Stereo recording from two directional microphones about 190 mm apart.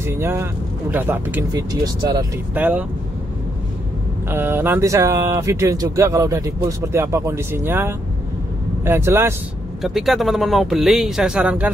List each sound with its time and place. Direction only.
0.0 s speech: 15° right (ahead or behind)
1.5 s speech: 20° right (ahead or behind)
2.5 s speech: 10° right (ahead or behind)
4.3 s speech: 10° right (ahead or behind)
9.8 s speech: centre (ahead or behind)